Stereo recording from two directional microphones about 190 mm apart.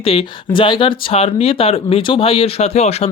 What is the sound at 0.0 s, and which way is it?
Speech, 30° left (ahead or behind).